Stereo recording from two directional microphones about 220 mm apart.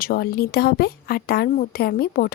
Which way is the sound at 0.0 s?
45° left (ahead or behind).